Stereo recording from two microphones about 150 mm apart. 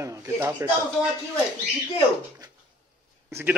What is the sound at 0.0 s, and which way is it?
Speech, 15° right (ahead or behind).